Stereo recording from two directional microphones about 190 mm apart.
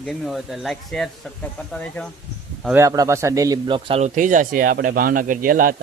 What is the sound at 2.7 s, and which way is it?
Speech, 15° right (ahead or behind).